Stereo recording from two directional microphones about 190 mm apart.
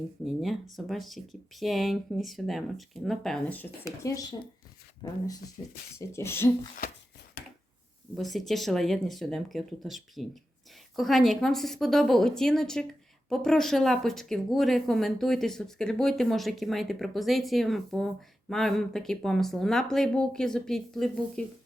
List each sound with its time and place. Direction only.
0.8 s a woman's voice: centre (ahead or behind)
8.1 s a woman's voice: centre (ahead or behind)